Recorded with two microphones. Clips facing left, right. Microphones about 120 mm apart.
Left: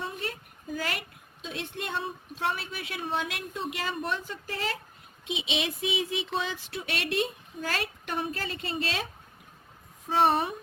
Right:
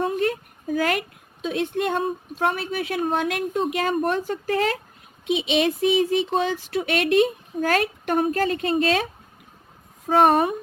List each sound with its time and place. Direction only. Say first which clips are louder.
0.0 s a woman's voice: right 13 dB; 50° right (ahead or behind)
10.1 s speech: right 7 dB; 55° right (ahead or behind)